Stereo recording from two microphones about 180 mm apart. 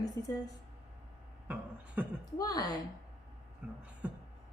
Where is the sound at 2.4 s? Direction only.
20° left (ahead or behind).